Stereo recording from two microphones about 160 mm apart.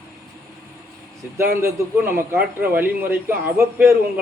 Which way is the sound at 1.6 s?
15° right (ahead or behind).